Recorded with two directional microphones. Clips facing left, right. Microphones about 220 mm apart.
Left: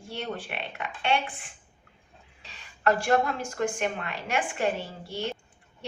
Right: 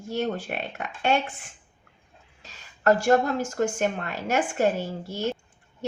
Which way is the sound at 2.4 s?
45° right (ahead or behind).